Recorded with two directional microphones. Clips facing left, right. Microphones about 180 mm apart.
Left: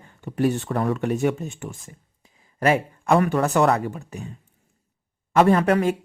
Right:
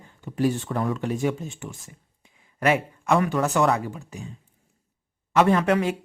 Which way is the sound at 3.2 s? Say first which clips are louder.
Left 2 dB; 55° left (ahead or behind).